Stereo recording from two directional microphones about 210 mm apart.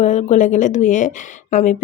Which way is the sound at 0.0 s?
35° left (ahead or behind).